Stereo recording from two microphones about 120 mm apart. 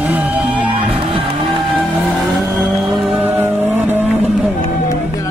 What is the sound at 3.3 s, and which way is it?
Vehicle, 20° right (ahead or behind).